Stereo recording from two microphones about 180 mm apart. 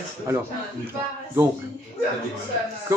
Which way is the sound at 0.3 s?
15° right (ahead or behind).